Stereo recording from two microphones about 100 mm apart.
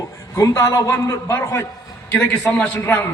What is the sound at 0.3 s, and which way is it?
A man's voice, 35° left (ahead or behind).